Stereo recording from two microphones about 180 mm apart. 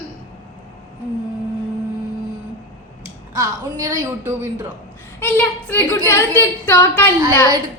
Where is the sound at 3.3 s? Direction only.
20° right (ahead or behind).